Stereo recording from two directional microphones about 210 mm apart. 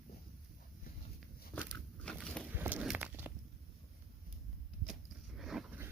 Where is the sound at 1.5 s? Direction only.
5° right (ahead or behind).